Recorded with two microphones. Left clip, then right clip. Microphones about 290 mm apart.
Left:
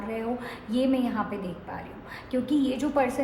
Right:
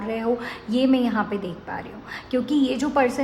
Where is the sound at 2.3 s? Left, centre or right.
Right.